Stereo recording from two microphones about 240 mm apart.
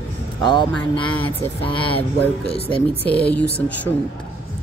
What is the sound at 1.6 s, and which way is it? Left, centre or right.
Speech, left.